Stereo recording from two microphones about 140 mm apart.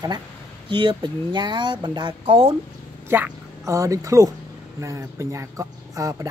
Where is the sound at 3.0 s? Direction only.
15° right (ahead or behind).